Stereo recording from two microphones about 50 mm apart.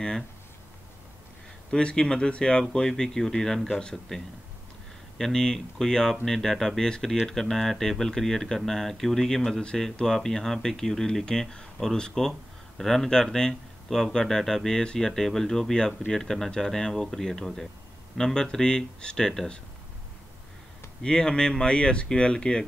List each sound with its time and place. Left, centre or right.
1.7 s speech: centre
21.0 s speech: centre